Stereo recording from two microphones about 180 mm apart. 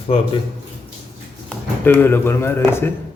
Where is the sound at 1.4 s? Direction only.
10° left (ahead or behind).